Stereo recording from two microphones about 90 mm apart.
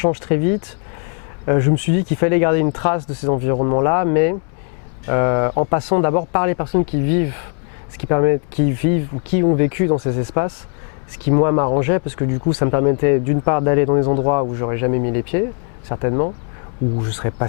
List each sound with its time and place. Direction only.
0.0 s speech: 15° left (ahead or behind)